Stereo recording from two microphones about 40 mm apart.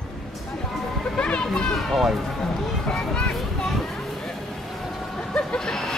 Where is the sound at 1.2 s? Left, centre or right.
Centre.